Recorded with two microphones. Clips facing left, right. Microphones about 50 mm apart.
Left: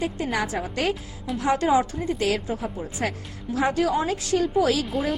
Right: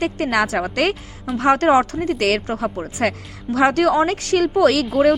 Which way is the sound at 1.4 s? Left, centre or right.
Right.